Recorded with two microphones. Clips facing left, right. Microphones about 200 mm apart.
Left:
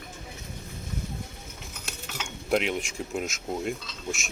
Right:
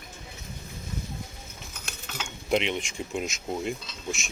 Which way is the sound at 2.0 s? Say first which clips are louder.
Even; centre (ahead or behind).